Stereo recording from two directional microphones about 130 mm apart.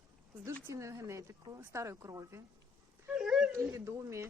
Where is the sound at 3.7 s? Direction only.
20° right (ahead or behind).